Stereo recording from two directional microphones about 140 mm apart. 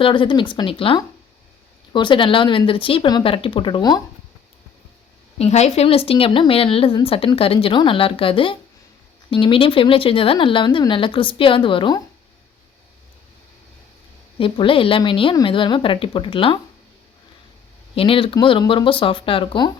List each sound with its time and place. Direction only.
0.0 s a woman's voice: 35° left (ahead or behind)
5.4 s a woman's voice: 50° left (ahead or behind)
14.3 s a woman's voice: 40° left (ahead or behind)
17.9 s a woman's voice: 40° left (ahead or behind)